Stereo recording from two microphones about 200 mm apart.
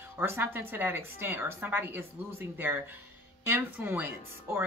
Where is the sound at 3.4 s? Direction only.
10° right (ahead or behind).